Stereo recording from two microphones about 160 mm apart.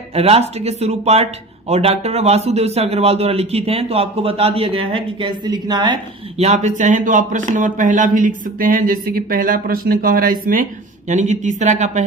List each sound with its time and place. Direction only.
0.1 s a woman's voice: 40° right (ahead or behind)
6.3 s speech: 45° right (ahead or behind); by 10.7 s 60° right (ahead or behind)
11.1 s speech: 50° right (ahead or behind)